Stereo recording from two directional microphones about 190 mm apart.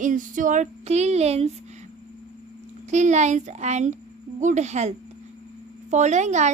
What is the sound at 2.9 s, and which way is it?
A woman's voice, 40° right (ahead or behind).